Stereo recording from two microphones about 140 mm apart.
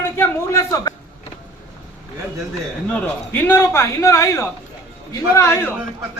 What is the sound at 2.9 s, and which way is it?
A man's voice, 10° left (ahead or behind).